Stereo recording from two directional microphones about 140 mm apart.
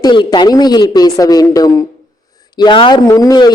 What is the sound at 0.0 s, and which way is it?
A man's voice, 30° left (ahead or behind).